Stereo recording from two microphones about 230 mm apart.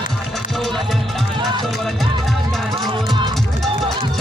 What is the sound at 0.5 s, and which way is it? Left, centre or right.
Music, centre.